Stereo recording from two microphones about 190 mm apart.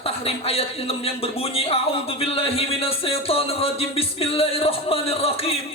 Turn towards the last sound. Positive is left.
turn(degrees=30)  # may be behind; listen again after turning